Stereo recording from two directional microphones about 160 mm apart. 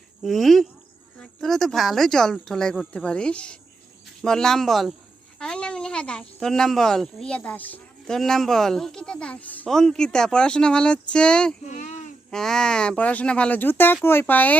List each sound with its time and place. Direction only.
0.2 s speech: centre (ahead or behind)
11.7 s a sound: 50° left (ahead or behind)
12.3 s speech: 5° left (ahead or behind)